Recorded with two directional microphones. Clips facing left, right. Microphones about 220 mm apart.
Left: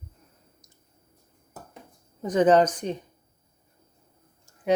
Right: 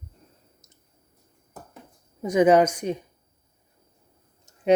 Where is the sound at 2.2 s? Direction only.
10° right (ahead or behind).